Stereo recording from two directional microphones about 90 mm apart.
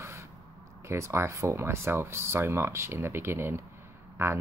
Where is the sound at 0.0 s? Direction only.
30° right (ahead or behind).